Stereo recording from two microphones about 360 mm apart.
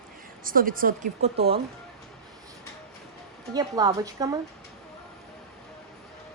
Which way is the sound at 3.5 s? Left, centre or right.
Centre.